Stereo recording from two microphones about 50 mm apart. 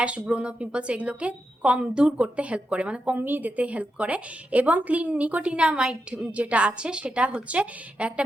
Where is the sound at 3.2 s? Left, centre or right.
Right.